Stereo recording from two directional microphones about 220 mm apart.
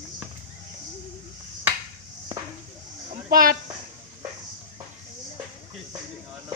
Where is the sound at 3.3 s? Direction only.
40° right (ahead or behind).